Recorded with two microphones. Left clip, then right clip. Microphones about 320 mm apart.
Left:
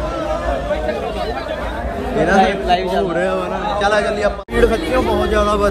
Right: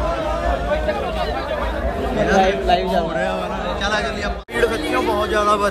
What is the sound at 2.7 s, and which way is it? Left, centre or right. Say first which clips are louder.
Speech: left 1 dB; left.